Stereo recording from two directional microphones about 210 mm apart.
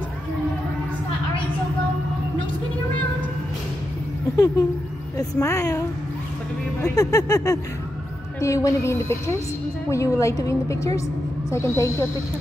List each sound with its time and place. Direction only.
5.4 s a woman's voice: 15° left (ahead or behind)
7.0 s a woman's voice: 15° left (ahead or behind)